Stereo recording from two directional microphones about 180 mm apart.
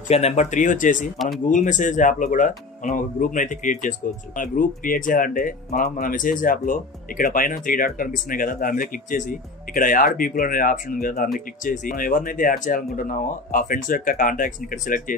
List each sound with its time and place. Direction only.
0.1 s speech: 35° left (ahead or behind)
1.1 s speech: centre (ahead or behind)
1.5 s speech: 45° left (ahead or behind)